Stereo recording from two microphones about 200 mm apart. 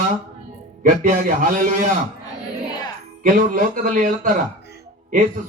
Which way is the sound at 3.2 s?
40° right (ahead or behind).